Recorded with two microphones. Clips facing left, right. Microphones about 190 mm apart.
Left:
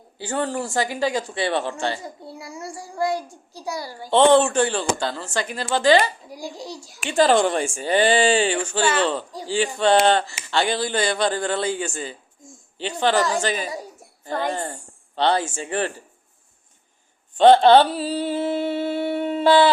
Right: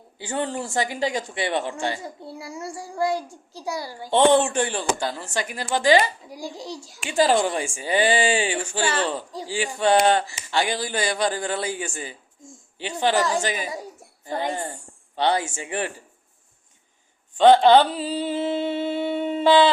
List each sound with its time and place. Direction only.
0.2 s humming: 20° right (ahead or behind)
2.4 s humming: 30° right (ahead or behind)
3.5 s speech: 25° right (ahead or behind)
7.1 s a woman's voice: 10° right (ahead or behind)
17.5 s humming: 15° right (ahead or behind)